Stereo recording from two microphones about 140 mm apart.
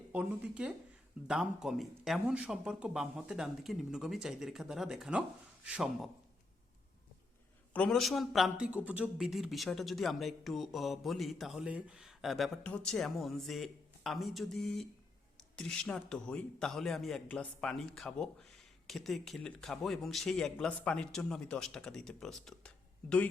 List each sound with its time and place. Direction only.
0.1 s speech: 10° right (ahead or behind)
7.7 s speech: 5° left (ahead or behind)